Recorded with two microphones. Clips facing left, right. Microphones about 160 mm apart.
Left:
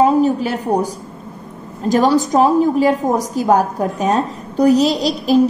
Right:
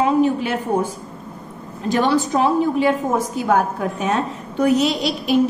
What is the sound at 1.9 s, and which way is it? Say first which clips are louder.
A woman's voice: left 4 dB; 40° left (ahead or behind).